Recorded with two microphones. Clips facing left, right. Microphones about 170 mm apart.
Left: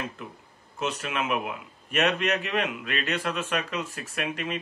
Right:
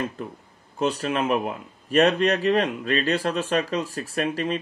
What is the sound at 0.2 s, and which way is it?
A man's voice, 35° right (ahead or behind).